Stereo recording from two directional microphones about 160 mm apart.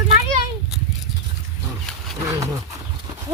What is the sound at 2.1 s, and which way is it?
Wild animals, 20° right (ahead or behind).